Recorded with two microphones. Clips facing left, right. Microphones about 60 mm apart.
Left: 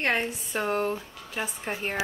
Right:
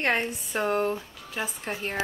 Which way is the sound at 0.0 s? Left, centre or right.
Centre.